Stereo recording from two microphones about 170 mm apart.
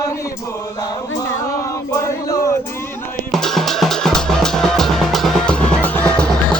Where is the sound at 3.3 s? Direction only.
Centre (ahead or behind).